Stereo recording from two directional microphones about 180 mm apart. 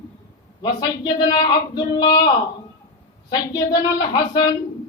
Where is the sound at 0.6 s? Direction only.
25° left (ahead or behind).